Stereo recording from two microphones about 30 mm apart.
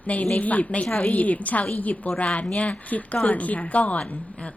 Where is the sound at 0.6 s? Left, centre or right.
Left.